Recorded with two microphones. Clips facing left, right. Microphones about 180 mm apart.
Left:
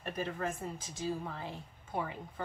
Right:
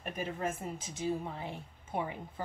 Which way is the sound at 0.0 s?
15° right (ahead or behind).